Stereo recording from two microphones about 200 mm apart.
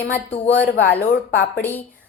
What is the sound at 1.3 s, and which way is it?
Speech, 45° left (ahead or behind).